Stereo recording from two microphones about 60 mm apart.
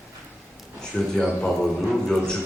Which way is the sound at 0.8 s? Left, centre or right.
Centre.